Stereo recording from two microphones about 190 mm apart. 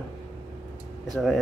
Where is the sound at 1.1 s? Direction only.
Centre (ahead or behind).